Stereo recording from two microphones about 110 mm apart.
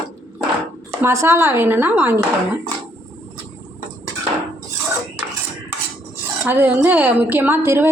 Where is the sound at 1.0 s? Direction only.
25° right (ahead or behind).